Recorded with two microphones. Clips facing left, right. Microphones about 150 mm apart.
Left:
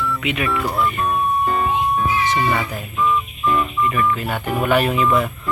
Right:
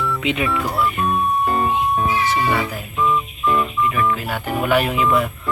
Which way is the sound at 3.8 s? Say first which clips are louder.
Even; centre (ahead or behind).